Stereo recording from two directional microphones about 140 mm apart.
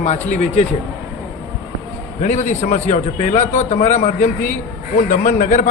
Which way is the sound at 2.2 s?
60° left (ahead or behind).